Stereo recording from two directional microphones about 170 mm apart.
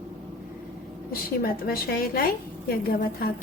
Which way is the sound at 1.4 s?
60° left (ahead or behind).